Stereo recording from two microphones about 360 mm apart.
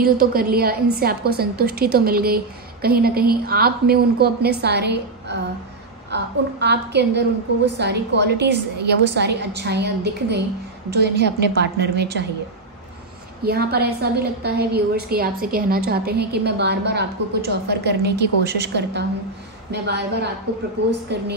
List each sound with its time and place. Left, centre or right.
0.0 s a woman's voice: right
13.4 s a woman's voice: right